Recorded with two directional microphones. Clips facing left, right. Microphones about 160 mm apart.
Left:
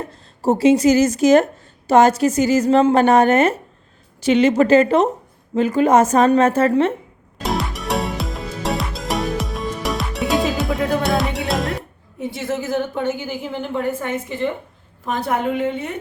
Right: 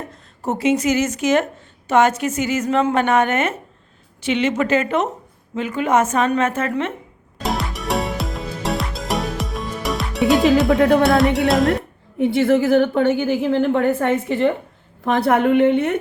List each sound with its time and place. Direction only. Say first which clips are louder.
0.1 s a woman's voice: left 8 dB; 35° left (ahead or behind)
7.4 s music: even; centre (ahead or behind)
12.2 s a woman's voice: right 9 dB; 65° right (ahead or behind)